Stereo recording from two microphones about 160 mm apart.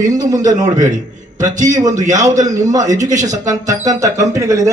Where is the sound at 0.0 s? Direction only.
20° right (ahead or behind).